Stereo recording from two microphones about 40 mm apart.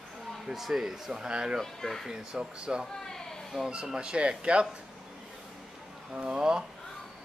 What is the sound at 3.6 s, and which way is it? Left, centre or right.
Speech, centre.